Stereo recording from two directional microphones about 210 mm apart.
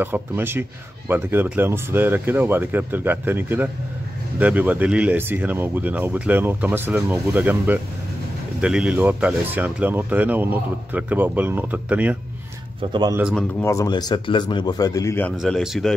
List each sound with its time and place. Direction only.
0.0 s speech: 10° right (ahead or behind)
12.9 s a man's voice: 20° right (ahead or behind)
13.2 s speech: 5° left (ahead or behind)
15.3 s speech: centre (ahead or behind)